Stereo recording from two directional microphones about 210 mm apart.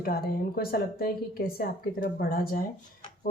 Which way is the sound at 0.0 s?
45° left (ahead or behind).